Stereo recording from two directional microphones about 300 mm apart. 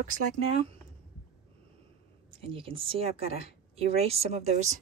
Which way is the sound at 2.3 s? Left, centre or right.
Centre.